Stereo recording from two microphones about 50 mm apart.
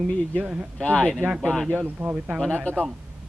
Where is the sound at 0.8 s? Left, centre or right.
Centre.